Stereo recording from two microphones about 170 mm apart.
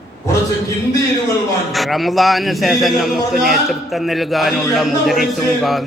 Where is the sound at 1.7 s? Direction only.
Centre (ahead or behind).